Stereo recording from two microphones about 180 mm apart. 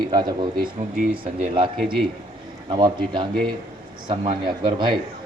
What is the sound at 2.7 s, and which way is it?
Speech, 25° right (ahead or behind).